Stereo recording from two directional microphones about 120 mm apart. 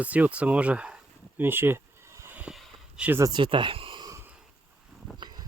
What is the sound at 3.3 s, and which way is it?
Speech, 40° right (ahead or behind).